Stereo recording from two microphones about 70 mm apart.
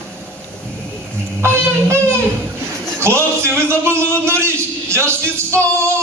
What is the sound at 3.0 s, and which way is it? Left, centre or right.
A man's voice, right.